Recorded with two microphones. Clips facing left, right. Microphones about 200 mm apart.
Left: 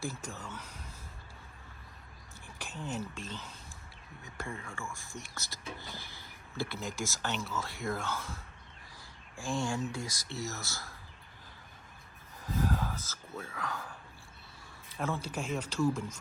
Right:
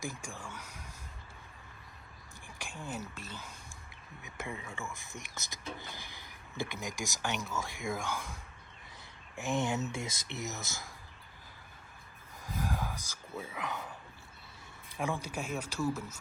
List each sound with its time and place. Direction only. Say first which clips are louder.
0.0 s speech: left 2 dB; 10° right (ahead or behind)
2.6 s whispering: left 2 dB; 10° right (ahead or behind)
3.2 s speech: left 3 dB; 10° right (ahead or behind)
12.4 s speech: left 4 dB; 10° right (ahead or behind)